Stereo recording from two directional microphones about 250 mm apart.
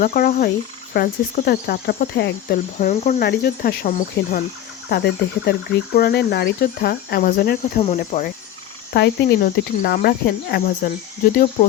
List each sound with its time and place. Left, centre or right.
0.0 s speech: left
2.7 s speech: left
3.2 s speech: left